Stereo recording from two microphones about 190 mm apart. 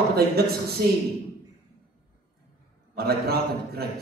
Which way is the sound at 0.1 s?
55° right (ahead or behind).